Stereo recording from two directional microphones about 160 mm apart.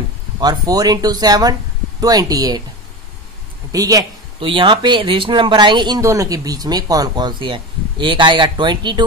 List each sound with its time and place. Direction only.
0.4 s speech: 25° right (ahead or behind)
3.7 s speech: 20° right (ahead or behind)